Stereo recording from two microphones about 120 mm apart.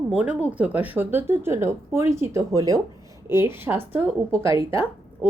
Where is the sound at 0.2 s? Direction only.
10° right (ahead or behind).